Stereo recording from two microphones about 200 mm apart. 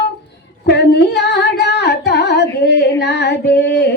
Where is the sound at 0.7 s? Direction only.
55° left (ahead or behind).